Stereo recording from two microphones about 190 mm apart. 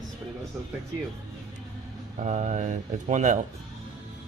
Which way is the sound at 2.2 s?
35° right (ahead or behind).